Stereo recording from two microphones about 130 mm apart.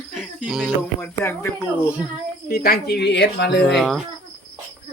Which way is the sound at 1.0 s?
15° left (ahead or behind).